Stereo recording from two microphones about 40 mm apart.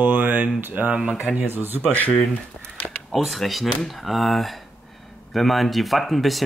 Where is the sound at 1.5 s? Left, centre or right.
Right.